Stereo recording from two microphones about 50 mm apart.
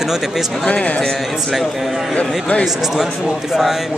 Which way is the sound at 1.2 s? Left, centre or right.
Centre.